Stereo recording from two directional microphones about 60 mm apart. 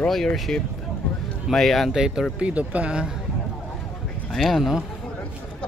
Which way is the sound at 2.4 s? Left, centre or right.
Right.